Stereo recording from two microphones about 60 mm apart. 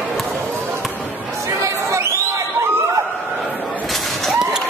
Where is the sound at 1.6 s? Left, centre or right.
Right.